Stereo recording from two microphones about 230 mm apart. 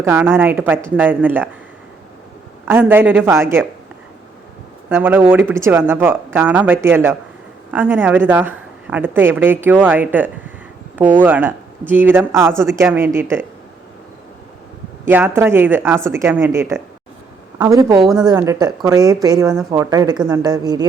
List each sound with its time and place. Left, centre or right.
0.0 s speech: centre
2.6 s speech: centre
4.9 s speech: centre
15.0 s speech: centre